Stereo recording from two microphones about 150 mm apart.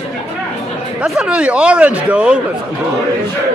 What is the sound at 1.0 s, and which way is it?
Speech, 5° right (ahead or behind).